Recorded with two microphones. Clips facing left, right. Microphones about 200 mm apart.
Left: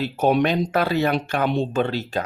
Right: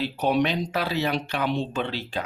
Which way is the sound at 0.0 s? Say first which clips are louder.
Left 4 dB; 45° left (ahead or behind).